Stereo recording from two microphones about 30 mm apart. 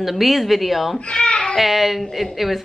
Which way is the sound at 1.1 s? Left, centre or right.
Left.